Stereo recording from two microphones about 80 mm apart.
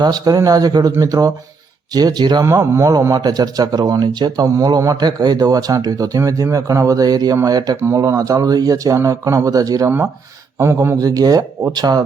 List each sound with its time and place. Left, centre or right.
0.0 s speech: right
2.7 s speech: right
3.2 s speech: right
4.4 s speech: right
4.9 s speech: right
10.6 s speech: right
10.9 s speech: right